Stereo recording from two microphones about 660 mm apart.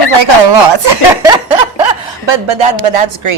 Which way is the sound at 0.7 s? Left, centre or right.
Right.